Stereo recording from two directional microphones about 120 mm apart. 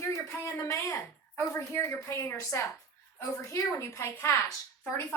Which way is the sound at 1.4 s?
20° left (ahead or behind).